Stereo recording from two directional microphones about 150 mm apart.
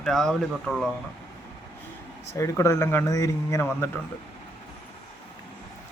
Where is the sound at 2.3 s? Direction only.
20° left (ahead or behind).